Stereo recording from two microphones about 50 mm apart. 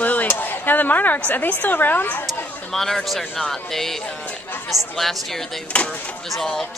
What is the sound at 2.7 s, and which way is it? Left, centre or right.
A woman's voice, centre.